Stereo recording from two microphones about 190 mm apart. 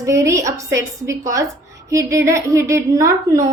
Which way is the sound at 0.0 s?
15° right (ahead or behind).